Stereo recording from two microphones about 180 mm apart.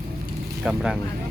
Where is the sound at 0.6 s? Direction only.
5° right (ahead or behind).